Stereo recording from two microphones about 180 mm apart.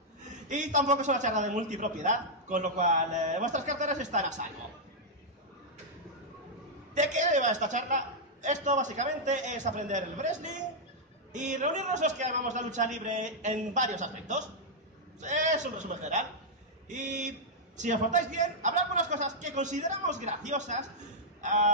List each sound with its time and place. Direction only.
0.5 s a man's voice: 45° right (ahead or behind)
6.9 s a man's voice: 40° right (ahead or behind)